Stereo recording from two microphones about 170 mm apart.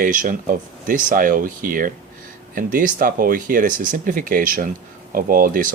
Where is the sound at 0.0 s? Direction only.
50° right (ahead or behind).